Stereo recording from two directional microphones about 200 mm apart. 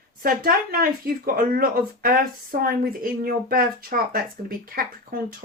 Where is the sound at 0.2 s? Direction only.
45° right (ahead or behind).